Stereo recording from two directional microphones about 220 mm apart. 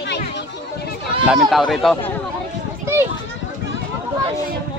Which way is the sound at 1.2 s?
Centre (ahead or behind).